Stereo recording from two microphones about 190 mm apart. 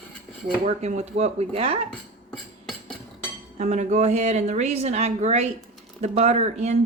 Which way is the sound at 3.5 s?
40° right (ahead or behind).